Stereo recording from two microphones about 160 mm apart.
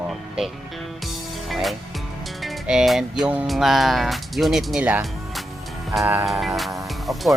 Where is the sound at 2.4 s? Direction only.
Centre (ahead or behind).